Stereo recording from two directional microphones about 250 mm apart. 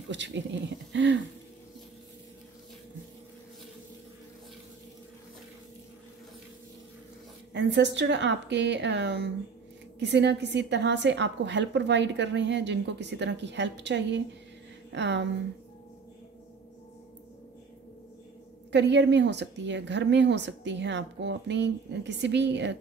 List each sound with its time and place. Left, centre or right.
0.1 s a woman's voice: right
7.5 s a woman's voice: right
18.7 s a woman's voice: right